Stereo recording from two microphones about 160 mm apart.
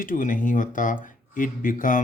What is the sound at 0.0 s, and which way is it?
Speech, 55° left (ahead or behind).